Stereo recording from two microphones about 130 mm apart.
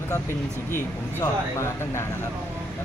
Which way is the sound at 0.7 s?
20° left (ahead or behind).